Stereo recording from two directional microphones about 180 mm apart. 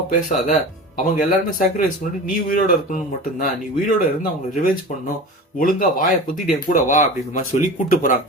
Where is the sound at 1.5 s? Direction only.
45° left (ahead or behind).